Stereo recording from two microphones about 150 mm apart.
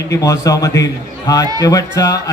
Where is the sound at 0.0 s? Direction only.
20° left (ahead or behind).